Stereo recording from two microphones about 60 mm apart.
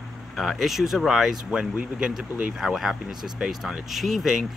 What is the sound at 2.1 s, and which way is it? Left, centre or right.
Speech, centre.